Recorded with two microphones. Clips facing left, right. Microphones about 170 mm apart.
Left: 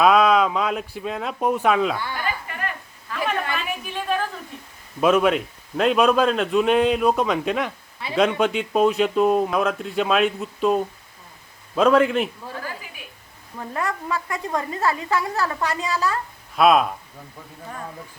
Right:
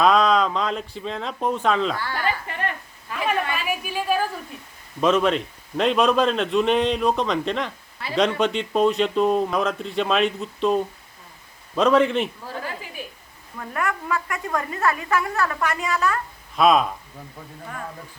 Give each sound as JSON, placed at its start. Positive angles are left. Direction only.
{"t": 0.0, "sound": "speech", "side_deg": 5}
{"t": 2.5, "sound": "a sound", "side_deg": -30}
{"t": 3.2, "sound": "a sound", "side_deg": -5}
{"t": 4.9, "sound": "a man's voice", "side_deg": 10}
{"t": 13.6, "sound": "a woman's voice", "side_deg": 30}
{"t": 16.6, "sound": "a man's voice", "side_deg": 5}